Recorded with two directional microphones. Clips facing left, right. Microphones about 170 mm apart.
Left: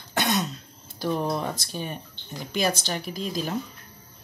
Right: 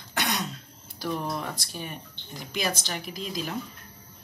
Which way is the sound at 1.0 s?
30° left (ahead or behind).